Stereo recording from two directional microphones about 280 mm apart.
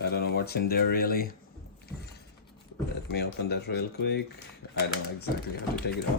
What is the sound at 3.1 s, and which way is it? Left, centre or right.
Speech, left.